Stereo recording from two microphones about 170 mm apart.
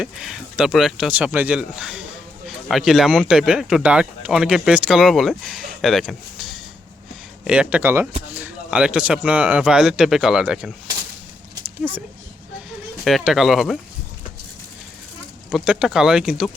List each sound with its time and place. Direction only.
0.0 s speech: centre (ahead or behind)
11.8 s speech: 10° right (ahead or behind)
13.1 s speech: centre (ahead or behind)
15.4 s speech: 5° right (ahead or behind)